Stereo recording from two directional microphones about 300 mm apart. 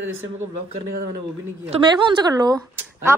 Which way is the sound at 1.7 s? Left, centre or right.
Centre.